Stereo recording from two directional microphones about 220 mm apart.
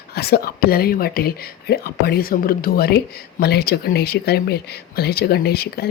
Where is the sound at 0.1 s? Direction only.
45° left (ahead or behind).